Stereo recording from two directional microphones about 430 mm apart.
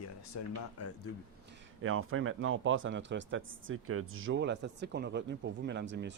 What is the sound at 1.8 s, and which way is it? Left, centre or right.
Speech, right.